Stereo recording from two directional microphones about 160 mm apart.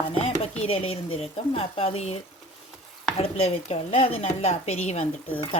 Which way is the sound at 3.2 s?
40° left (ahead or behind).